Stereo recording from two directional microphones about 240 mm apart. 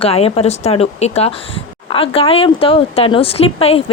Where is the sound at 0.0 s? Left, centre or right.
Left.